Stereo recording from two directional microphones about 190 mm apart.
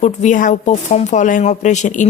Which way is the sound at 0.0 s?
40° left (ahead or behind).